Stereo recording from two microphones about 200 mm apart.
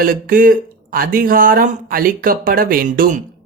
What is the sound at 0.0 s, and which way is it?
Speech, 45° right (ahead or behind).